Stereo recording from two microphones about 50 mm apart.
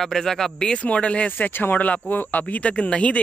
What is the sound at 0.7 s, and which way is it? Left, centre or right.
Speech, left.